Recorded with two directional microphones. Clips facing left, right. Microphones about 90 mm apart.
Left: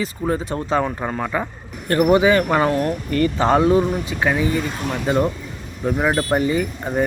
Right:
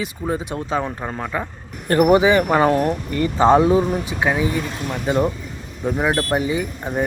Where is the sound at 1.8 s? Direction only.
30° right (ahead or behind); by 6.1 s centre (ahead or behind).